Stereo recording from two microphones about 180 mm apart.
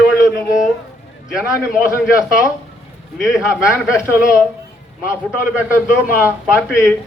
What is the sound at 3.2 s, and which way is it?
Speech, 5° right (ahead or behind).